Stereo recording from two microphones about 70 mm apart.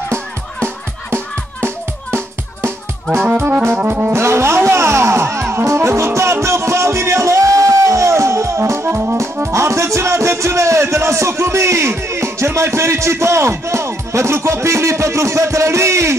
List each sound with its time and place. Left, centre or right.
1.1 s music: right
3.3 s music: right
4.1 s music: right